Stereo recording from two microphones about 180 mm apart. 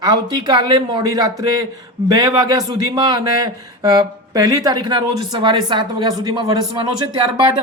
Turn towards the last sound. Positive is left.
turn(degrees=-25)  # may be behind; listen again after turning